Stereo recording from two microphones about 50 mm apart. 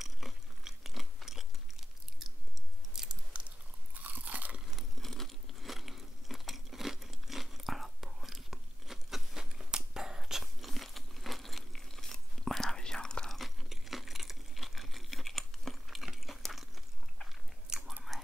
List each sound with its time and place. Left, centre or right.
0.0 s biting: centre
2.9 s biting: centre
3.3 s a sound: right
4.0 s crunch: right
4.6 s crunch: centre
13.3 s a sound: centre
17.6 s chewing: centre